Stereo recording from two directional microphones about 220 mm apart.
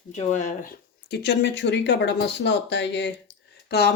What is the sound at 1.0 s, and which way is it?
Speech, 50° left (ahead or behind).